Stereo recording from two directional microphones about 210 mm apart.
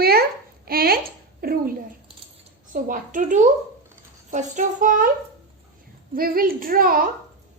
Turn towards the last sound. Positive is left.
turn(degrees=-45)  # may be behind; listen again after turning